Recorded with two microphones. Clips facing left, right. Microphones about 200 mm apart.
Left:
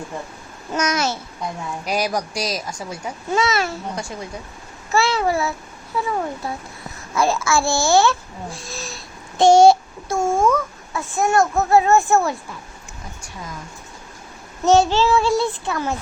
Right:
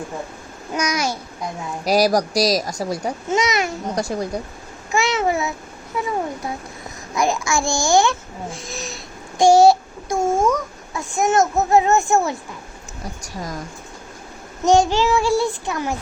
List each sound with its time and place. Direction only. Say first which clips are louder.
0.7 s a child's voice: left 1 dB; 10° right (ahead or behind)
1.8 s a woman's voice: right 7 dB; 35° right (ahead or behind)
3.2 s a child's voice: left 1 dB; 20° right (ahead or behind)
3.9 s a woman's voice: right 7 dB; 35° right (ahead or behind)
4.9 s a child's voice: even; 20° right (ahead or behind)
9.4 s a child's voice: left 1 dB; 5° right (ahead or behind)
10.3 s babbling: left 1 dB; 20° right (ahead or behind)
11.1 s a child's voice: even; 20° right (ahead or behind)
13.2 s a woman's voice: right 5 dB; 40° right (ahead or behind)
14.6 s a child's voice: even; 15° right (ahead or behind)